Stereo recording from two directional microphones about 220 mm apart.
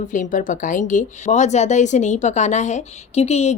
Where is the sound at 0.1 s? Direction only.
35° left (ahead or behind).